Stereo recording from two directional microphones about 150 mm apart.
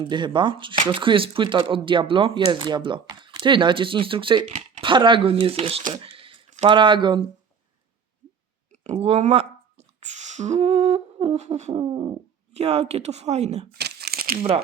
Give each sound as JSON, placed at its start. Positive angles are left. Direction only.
{"t": 0.0, "sound": "speech", "side_deg": -30}
{"t": 5.9, "sound": "a sound", "side_deg": -35}
{"t": 6.7, "sound": "speech", "side_deg": -30}
{"t": 8.7, "sound": "speech", "side_deg": -50}
{"t": 11.8, "sound": "speech", "side_deg": -35}
{"t": 13.7, "sound": "crumpling", "side_deg": -90}